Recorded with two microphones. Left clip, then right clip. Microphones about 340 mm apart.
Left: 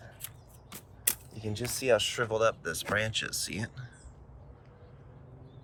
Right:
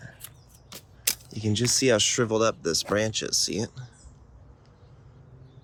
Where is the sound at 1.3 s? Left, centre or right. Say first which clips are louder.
Right 11 dB; right.